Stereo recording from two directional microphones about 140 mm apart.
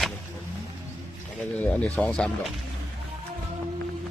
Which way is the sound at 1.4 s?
10° left (ahead or behind).